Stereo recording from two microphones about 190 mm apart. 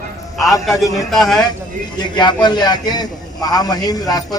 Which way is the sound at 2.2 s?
20° left (ahead or behind).